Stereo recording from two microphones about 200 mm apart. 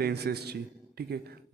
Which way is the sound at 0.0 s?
55° right (ahead or behind).